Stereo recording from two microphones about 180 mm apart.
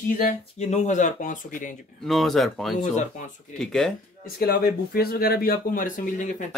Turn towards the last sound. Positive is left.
turn(degrees=45)  # may be behind; listen again after turning